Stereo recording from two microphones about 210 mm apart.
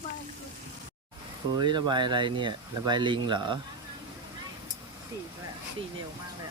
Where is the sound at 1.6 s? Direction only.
20° right (ahead or behind).